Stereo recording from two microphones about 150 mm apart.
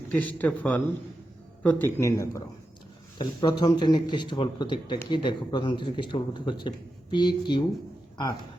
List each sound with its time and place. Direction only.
0.1 s a man's voice: 10° left (ahead or behind)
3.2 s speech: 30° left (ahead or behind)